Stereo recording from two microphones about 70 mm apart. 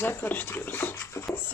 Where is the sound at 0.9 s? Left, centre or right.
Left.